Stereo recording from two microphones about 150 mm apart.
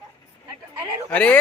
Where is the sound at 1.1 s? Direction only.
10° left (ahead or behind).